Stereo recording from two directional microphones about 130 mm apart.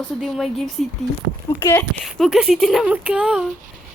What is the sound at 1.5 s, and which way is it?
Speech, 20° left (ahead or behind).